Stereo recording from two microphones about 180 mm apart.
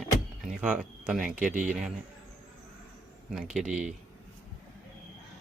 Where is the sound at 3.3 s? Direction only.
5° right (ahead or behind).